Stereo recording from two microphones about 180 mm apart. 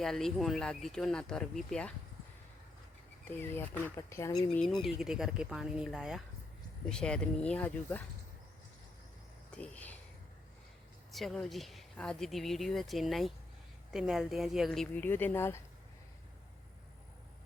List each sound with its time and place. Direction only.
0.0 s speech: centre (ahead or behind)
3.4 s speech: 10° left (ahead or behind)
4.5 s speech: centre (ahead or behind)
9.5 s a sound: 5° left (ahead or behind)
11.1 s speech: centre (ahead or behind)